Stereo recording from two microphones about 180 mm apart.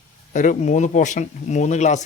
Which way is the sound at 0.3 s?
45° left (ahead or behind).